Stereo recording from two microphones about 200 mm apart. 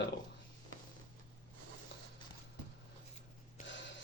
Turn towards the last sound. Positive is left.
turn(degrees=65)  # may be behind; listen again after turning